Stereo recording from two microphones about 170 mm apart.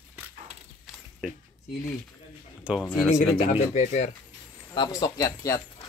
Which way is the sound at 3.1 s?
35° left (ahead or behind).